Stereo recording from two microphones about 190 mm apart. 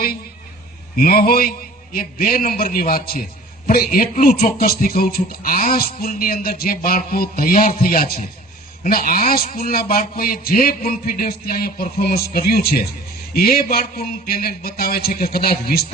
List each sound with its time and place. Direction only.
0.9 s speech: 50° left (ahead or behind)